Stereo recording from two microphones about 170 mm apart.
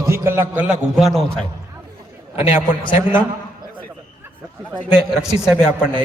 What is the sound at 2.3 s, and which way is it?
Speech, 35° left (ahead or behind).